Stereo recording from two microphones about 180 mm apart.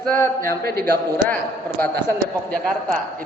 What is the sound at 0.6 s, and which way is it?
Speech, 60° right (ahead or behind).